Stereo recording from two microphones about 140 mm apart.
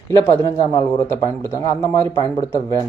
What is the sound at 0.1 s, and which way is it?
A man's voice, 25° left (ahead or behind).